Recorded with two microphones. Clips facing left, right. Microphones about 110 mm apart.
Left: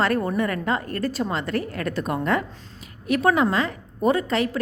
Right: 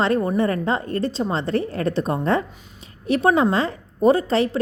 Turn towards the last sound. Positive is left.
turn(degrees=-30)  # may be behind; listen again after turning